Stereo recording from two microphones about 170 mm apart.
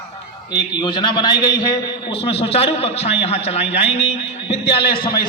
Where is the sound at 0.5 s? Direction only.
25° left (ahead or behind).